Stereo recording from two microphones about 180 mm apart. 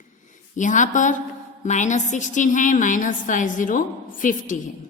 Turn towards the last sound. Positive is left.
turn(degrees=45)  # may be behind; listen again after turning